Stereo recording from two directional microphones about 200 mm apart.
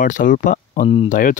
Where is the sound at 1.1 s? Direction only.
45° left (ahead or behind).